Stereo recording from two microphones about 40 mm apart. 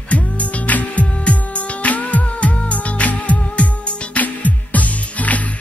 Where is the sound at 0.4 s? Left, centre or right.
Left.